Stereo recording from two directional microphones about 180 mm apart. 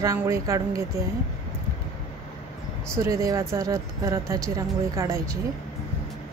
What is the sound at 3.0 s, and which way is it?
Speech, 15° right (ahead or behind).